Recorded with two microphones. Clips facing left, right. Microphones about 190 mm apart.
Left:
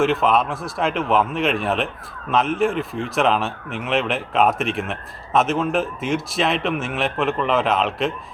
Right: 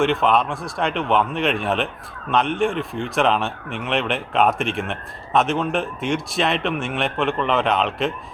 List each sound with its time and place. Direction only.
0.0 s speech: centre (ahead or behind)